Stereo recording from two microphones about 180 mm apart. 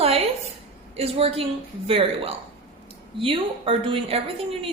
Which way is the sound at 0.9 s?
30° right (ahead or behind).